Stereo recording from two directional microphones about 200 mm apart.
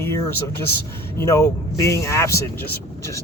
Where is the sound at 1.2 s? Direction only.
15° left (ahead or behind).